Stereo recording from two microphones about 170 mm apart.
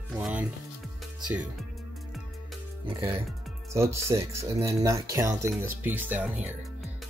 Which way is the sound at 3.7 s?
15° right (ahead or behind).